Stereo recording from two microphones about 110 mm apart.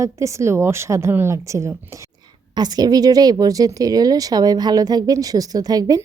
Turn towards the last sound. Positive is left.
turn(degrees=-35)  # may be behind; listen again after turning